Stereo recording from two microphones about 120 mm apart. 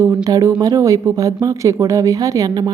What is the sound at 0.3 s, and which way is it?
Speech, 30° right (ahead or behind).